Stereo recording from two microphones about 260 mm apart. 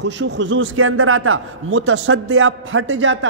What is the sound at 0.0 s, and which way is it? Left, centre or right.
A man's voice, right.